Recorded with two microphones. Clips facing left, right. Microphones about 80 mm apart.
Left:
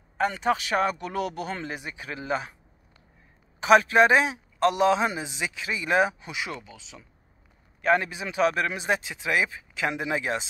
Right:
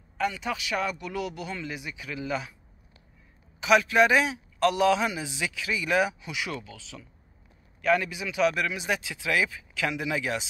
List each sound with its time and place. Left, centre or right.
0.2 s speech: left
3.6 s a man's voice: left
7.8 s speech: left